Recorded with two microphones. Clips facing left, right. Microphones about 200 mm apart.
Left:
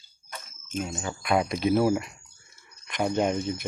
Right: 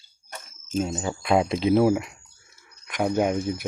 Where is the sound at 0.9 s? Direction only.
25° right (ahead or behind).